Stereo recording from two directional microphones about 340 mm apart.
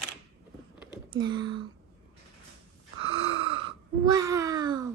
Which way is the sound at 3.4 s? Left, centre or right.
Centre.